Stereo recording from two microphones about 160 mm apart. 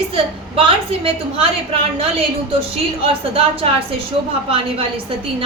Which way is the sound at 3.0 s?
35° right (ahead or behind).